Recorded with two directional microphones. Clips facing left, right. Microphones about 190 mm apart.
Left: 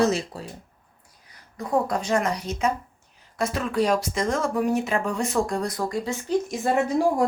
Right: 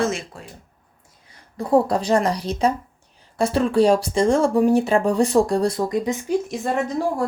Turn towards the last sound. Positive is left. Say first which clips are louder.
# left 1 dB
turn(degrees=10)  # may be behind; listen again after turning